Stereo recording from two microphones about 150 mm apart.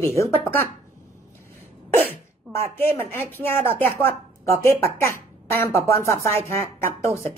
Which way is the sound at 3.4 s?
15° left (ahead or behind).